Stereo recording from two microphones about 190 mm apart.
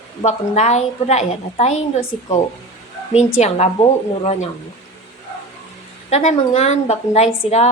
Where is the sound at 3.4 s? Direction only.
35° left (ahead or behind).